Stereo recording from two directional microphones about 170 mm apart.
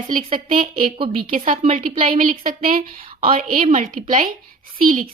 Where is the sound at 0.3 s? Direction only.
55° right (ahead or behind).